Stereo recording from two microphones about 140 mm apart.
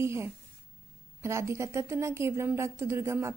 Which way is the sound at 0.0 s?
20° right (ahead or behind).